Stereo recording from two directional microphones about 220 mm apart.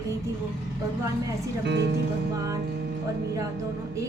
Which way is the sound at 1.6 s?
50° right (ahead or behind).